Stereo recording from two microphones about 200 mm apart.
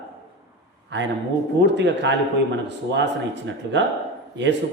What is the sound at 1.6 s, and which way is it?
Speech, 60° right (ahead or behind).